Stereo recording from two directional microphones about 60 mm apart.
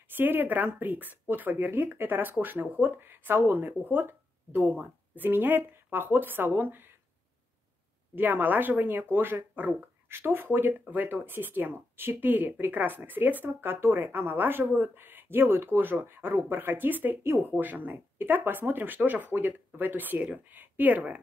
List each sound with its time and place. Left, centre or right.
0.1 s speech: right
8.2 s speech: right
9.8 s speech: right